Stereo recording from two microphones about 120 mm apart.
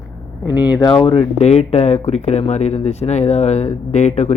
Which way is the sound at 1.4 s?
65° left (ahead or behind).